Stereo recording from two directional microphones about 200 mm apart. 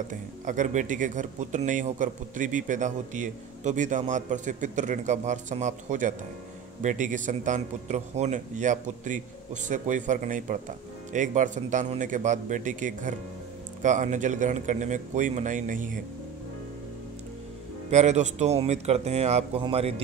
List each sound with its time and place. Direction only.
0.1 s speech: 40° right (ahead or behind)
17.8 s a man's voice: 35° right (ahead or behind)